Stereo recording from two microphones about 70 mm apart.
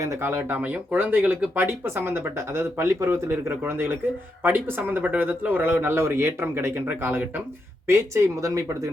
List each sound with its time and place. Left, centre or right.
0.0 s speech: right
1.6 s a man's voice: right
7.9 s speech: right